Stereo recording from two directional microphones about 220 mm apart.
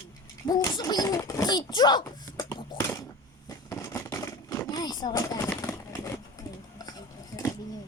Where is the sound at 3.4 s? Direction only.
10° left (ahead or behind).